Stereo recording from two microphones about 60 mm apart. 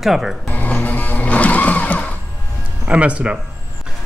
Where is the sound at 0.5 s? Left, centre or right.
Left.